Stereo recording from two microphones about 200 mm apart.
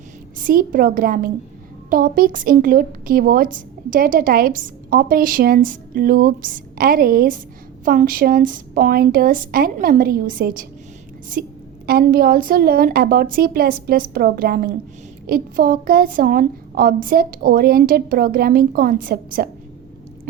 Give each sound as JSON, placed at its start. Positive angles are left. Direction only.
{"t": 0.3, "sound": "a woman's voice", "side_deg": -45}